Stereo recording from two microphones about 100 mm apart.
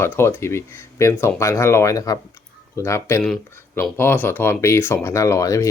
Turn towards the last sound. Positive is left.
turn(degrees=30)  # may be behind; listen again after turning